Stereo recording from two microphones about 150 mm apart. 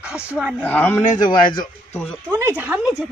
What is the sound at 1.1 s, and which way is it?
Speech, 30° left (ahead or behind).